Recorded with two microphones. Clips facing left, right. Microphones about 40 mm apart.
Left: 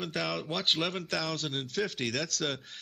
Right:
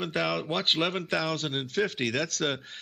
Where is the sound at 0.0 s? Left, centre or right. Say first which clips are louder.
Right 5 dB; centre.